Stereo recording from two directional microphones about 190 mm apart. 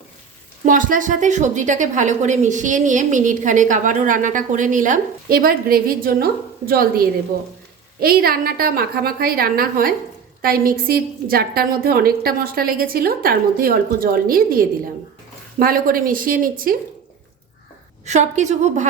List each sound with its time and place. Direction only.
0.6 s a woman's voice: 45° right (ahead or behind)
18.0 s a woman's voice: 40° right (ahead or behind)